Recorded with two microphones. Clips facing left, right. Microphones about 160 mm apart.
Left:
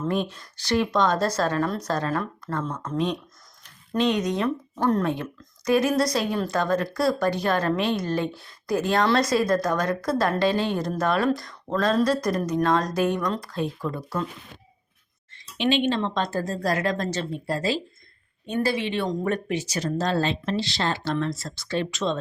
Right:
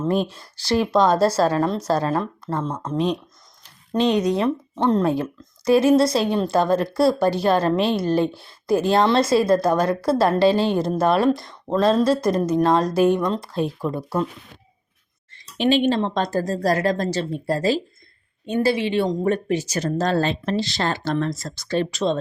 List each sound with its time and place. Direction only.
0.1 s speech: 35° right (ahead or behind)
5.0 s a woman's voice: 35° right (ahead or behind)
15.5 s speech: 40° right (ahead or behind)
18.4 s speech: 30° right (ahead or behind)